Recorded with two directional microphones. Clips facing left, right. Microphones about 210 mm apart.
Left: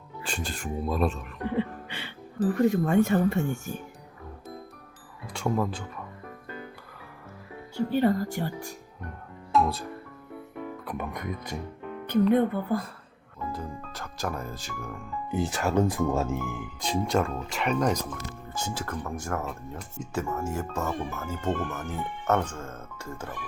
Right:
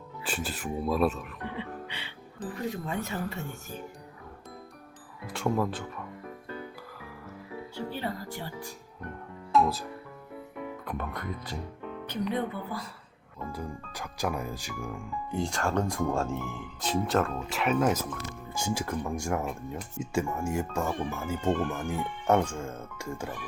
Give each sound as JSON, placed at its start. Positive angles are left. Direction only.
{"t": 0.2, "sound": "speech", "side_deg": -5}
{"t": 1.5, "sound": "music", "side_deg": 50}
{"t": 2.6, "sound": "speech", "side_deg": 55}
{"t": 5.2, "sound": "speech", "side_deg": 0}
{"t": 7.9, "sound": "speech", "side_deg": 50}
{"t": 9.5, "sound": "speech", "side_deg": 0}
{"t": 10.8, "sound": "speech", "side_deg": 10}
{"t": 12.3, "sound": "speech", "side_deg": 55}
{"t": 13.5, "sound": "speech", "side_deg": -15}
{"t": 15.3, "sound": "speech", "side_deg": 5}